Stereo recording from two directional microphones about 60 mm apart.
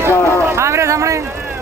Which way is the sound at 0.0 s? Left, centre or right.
Right.